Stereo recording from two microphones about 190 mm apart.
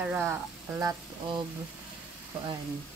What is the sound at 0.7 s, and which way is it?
Speech, 20° right (ahead or behind).